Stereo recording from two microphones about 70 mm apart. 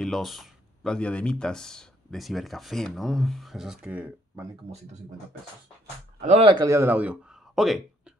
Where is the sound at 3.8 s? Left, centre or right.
Right.